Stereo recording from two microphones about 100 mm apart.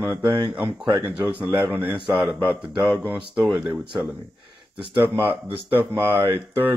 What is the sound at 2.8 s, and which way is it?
Speech, 10° right (ahead or behind).